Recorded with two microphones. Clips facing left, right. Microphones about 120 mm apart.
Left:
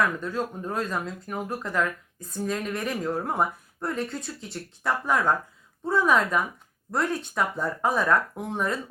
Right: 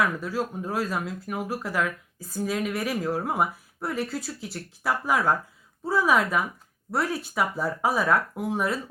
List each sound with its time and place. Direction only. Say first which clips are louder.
0.0 s speech: even; 5° right (ahead or behind)